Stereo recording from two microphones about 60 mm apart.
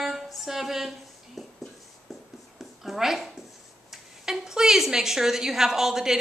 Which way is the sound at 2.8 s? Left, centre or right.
Centre.